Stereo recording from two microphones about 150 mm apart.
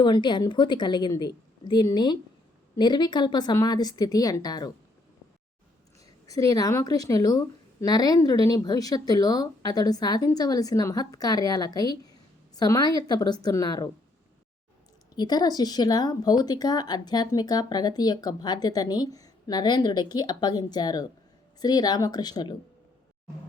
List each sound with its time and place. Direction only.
0.0 s speech: 30° left (ahead or behind)
6.2 s speech: 25° left (ahead or behind)
15.1 s speech: 30° left (ahead or behind)